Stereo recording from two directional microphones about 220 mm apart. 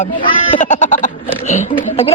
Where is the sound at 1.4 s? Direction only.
35° left (ahead or behind).